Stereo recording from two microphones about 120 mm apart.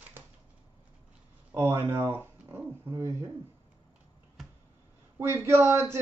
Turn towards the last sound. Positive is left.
turn(degrees=-20)  # may be behind; listen again after turning